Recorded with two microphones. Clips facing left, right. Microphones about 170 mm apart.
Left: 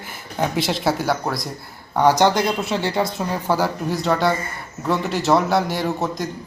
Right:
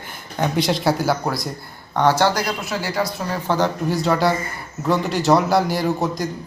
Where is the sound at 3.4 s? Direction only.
5° left (ahead or behind).